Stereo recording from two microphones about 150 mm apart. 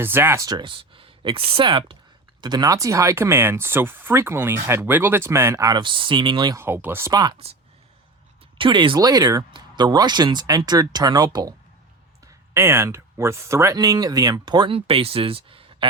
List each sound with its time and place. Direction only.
0.0 s speech: 15° right (ahead or behind); by 6.6 s 30° right (ahead or behind)
6.6 s speech: 15° right (ahead or behind)
7.1 s speech: 25° right (ahead or behind)
8.5 s speech: 35° right (ahead or behind)
12.5 s speech: 15° right (ahead or behind); by 15.9 s 35° right (ahead or behind)